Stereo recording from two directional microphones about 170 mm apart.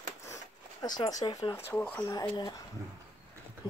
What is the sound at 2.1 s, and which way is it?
Speech, 20° left (ahead or behind).